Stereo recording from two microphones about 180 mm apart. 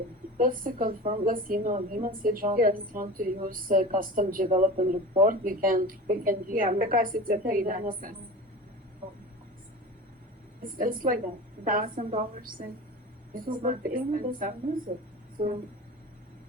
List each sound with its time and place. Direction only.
0.3 s a woman's voice: 50° right (ahead or behind)
10.6 s a woman's voice: 50° right (ahead or behind)